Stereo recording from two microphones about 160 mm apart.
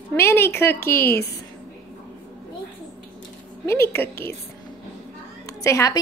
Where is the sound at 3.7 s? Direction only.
15° left (ahead or behind).